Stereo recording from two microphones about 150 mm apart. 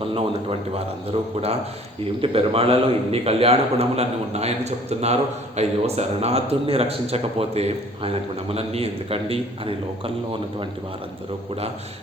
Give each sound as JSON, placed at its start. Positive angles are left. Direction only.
{"t": 0.1, "sound": "a man's voice", "side_deg": -40}
{"t": 2.2, "sound": "a man's voice", "side_deg": -35}